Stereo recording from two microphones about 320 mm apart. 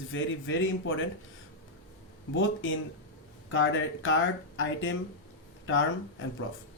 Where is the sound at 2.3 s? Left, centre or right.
Left.